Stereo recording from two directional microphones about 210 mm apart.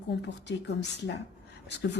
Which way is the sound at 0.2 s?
55° left (ahead or behind).